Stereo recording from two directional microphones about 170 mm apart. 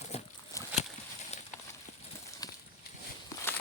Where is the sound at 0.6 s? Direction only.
20° left (ahead or behind).